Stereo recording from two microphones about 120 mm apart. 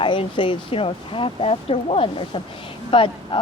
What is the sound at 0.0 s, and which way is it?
Speech, 45° left (ahead or behind).